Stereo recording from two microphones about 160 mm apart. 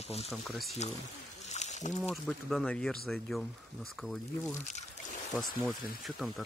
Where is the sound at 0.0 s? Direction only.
40° left (ahead or behind).